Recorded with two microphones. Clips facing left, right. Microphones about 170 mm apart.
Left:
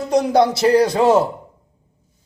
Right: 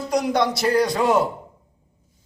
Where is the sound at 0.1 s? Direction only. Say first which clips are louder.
Left 6 dB; 25° left (ahead or behind).